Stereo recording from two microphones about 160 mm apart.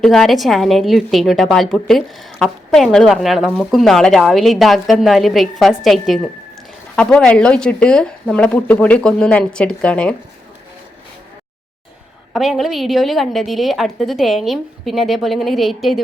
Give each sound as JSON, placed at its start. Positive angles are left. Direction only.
{"t": 0.0, "sound": "a woman's voice", "side_deg": 0}
{"t": 12.3, "sound": "a woman's voice", "side_deg": 0}